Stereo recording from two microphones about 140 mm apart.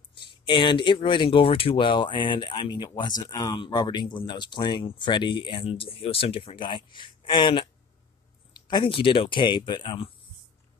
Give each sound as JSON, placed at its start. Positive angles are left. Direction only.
{"t": 0.1, "sound": "speech", "side_deg": 35}